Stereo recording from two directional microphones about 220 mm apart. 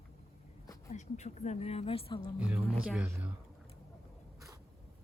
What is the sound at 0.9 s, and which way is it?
A woman's voice, 30° left (ahead or behind).